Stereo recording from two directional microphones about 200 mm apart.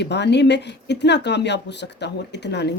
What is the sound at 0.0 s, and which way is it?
Speech, 60° left (ahead or behind).